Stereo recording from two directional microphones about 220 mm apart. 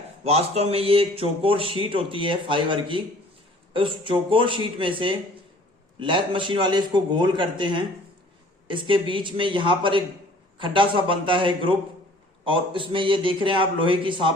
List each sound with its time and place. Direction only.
0.3 s a man's voice: 30° right (ahead or behind)